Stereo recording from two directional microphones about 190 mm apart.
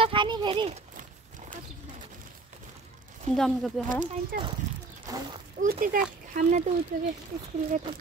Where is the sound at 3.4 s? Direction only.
Centre (ahead or behind).